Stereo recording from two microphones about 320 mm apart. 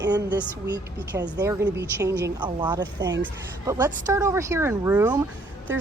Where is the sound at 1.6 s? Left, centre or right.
Right.